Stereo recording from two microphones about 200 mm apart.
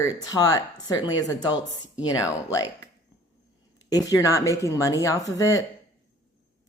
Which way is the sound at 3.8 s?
20° left (ahead or behind).